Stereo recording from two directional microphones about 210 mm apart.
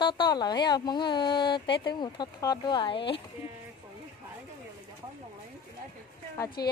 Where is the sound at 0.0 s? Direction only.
20° left (ahead or behind).